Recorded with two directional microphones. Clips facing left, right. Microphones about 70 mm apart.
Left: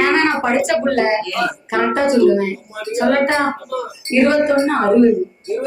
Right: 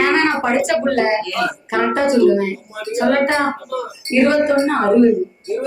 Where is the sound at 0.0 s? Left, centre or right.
Left.